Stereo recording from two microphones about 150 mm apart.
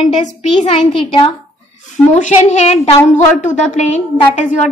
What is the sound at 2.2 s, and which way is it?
A woman's voice, 50° left (ahead or behind).